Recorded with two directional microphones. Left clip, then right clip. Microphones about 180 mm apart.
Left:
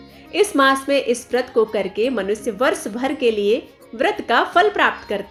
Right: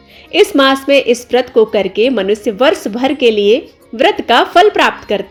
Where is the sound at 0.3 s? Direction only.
35° right (ahead or behind).